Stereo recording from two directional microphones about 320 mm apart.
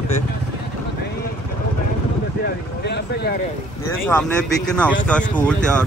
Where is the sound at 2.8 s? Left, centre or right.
Left.